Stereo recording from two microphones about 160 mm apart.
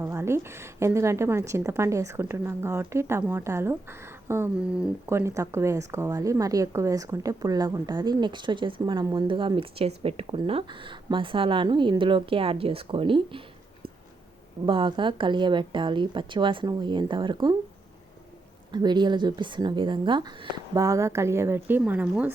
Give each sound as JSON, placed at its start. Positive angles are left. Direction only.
{"t": 0.0, "sound": "a woman's voice", "side_deg": -15}
{"t": 14.7, "sound": "a woman's voice", "side_deg": -30}
{"t": 18.7, "sound": "a woman's voice", "side_deg": -25}